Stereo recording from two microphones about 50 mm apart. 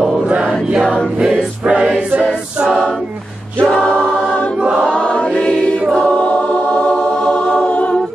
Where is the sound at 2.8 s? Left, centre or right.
Centre.